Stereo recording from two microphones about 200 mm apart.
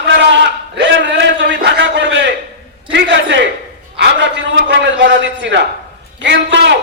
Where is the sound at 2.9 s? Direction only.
65° right (ahead or behind).